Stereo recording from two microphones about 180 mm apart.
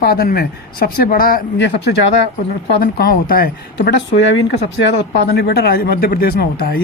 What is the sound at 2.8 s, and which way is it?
Speech, 55° left (ahead or behind).